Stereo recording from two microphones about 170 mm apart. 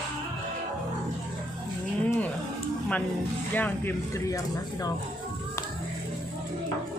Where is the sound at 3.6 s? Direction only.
10° left (ahead or behind).